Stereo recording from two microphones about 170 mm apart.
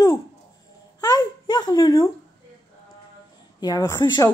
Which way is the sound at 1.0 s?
25° left (ahead or behind).